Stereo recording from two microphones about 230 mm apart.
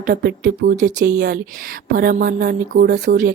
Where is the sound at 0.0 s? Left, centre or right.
Right.